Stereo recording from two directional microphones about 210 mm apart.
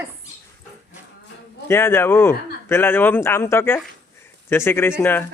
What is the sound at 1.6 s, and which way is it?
Speech, 10° left (ahead or behind).